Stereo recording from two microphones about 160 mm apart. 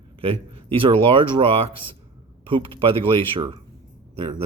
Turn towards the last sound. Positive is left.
turn(degrees=-30)  # may be behind; listen again after turning